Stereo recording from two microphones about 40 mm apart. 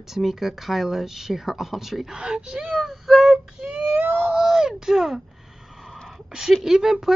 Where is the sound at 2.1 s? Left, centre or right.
Centre.